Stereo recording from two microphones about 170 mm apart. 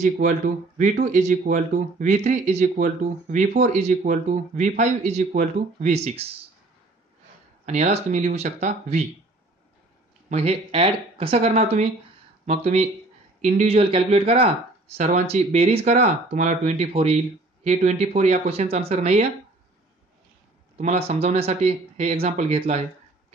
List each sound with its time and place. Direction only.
0.0 s speech: 45° right (ahead or behind)
7.6 s speech: 40° right (ahead or behind)
10.3 s speech: 35° right (ahead or behind)
20.7 s speech: 40° right (ahead or behind)